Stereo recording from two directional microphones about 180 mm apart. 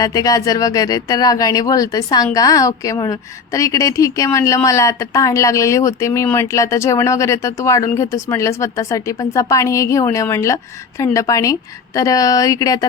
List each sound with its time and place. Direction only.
0.0 s speech: 20° left (ahead or behind)